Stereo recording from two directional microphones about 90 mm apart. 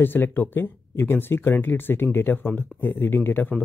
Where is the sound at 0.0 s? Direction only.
25° left (ahead or behind).